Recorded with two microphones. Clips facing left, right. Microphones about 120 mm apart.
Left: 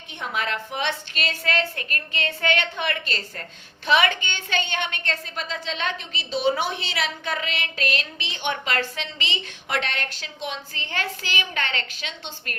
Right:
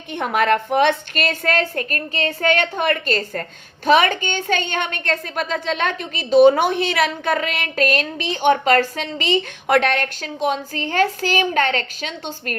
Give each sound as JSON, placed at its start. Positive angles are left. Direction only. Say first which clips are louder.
{"t": 0.1, "sound": "a woman's voice", "louder": "right 10 dB", "side_deg": -55}